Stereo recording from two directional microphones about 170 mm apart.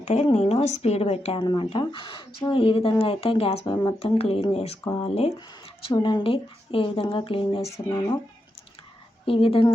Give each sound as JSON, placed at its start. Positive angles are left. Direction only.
{"t": 0.0, "sound": "a woman's voice", "side_deg": 35}
{"t": 9.2, "sound": "a woman's voice", "side_deg": 35}